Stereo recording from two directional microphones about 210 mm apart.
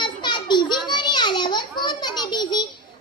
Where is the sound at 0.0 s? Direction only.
20° left (ahead or behind).